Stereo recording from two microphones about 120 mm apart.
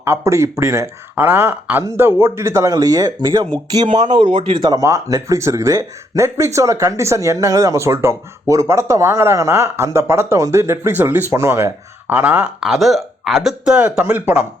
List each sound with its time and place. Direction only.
0.0 s speech: 20° right (ahead or behind)
4.1 s speech: 40° right (ahead or behind); by 14.3 s 15° right (ahead or behind)